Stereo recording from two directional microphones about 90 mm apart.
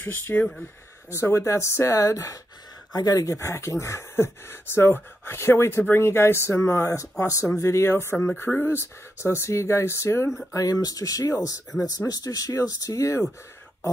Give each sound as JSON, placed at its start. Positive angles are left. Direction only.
{"t": 0.0, "sound": "speech", "side_deg": 25}
{"t": 0.4, "sound": "speech", "side_deg": 10}
{"t": 1.1, "sound": "speech", "side_deg": 30}